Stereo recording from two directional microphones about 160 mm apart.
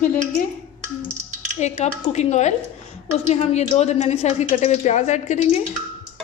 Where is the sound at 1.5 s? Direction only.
45° left (ahead or behind).